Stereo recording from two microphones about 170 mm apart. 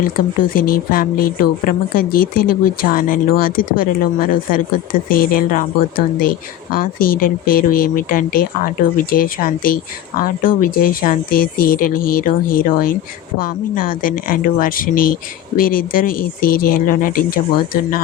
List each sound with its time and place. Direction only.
0.0 s speech: 55° left (ahead or behind)
6.7 s speech: 55° left (ahead or behind)